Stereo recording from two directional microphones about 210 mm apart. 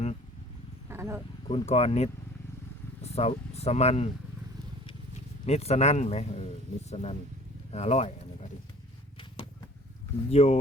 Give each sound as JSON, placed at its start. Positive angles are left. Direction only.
{"t": 0.9, "sound": "a sound", "side_deg": -10}
{"t": 1.5, "sound": "speech", "side_deg": 30}
{"t": 5.5, "sound": "speech", "side_deg": 30}
{"t": 10.2, "sound": "speech", "side_deg": 30}